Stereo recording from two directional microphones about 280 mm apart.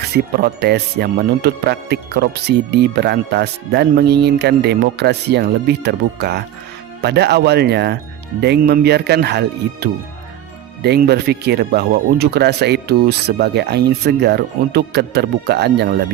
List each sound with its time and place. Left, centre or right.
0.3 s speech: right